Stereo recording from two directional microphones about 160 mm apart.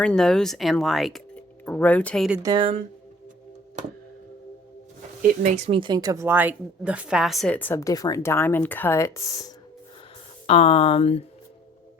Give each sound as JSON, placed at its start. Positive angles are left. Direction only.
{"t": 0.0, "sound": "speech", "side_deg": 5}
{"t": 2.4, "sound": "speech", "side_deg": -25}
{"t": 5.2, "sound": "speech", "side_deg": -50}
{"t": 10.4, "sound": "speech", "side_deg": 40}